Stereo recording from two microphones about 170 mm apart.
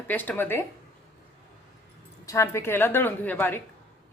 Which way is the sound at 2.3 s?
15° left (ahead or behind).